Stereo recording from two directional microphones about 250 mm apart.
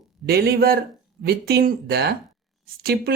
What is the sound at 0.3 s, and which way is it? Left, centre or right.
Speech, right.